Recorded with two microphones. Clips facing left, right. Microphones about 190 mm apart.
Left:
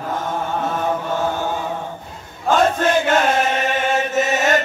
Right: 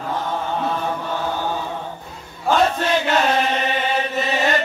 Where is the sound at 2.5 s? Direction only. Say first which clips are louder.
Left 2 dB; 45° left (ahead or behind).